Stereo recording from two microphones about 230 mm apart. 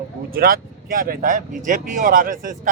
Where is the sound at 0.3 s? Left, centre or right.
Right.